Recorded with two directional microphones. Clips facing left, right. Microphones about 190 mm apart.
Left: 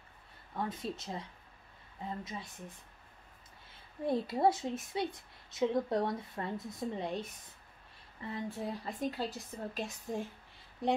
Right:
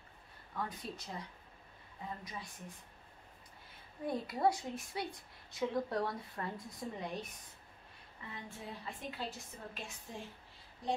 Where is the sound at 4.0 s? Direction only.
25° left (ahead or behind).